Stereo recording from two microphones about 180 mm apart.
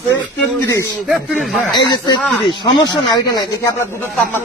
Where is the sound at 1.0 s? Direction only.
Centre (ahead or behind).